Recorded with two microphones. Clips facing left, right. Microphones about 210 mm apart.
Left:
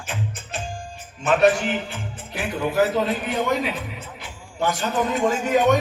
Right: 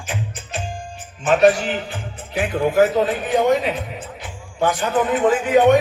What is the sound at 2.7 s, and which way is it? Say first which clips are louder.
A man's voice: right 4 dB; 50° right (ahead or behind).